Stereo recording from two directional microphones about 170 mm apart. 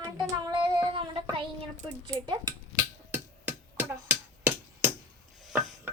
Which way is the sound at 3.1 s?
10° right (ahead or behind).